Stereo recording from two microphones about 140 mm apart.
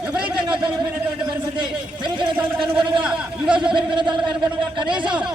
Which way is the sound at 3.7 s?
35° right (ahead or behind).